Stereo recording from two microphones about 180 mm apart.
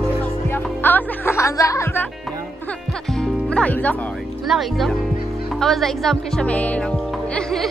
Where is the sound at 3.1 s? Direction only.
5° left (ahead or behind).